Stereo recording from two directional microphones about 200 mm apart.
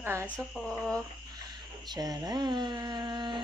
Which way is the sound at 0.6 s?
Centre (ahead or behind).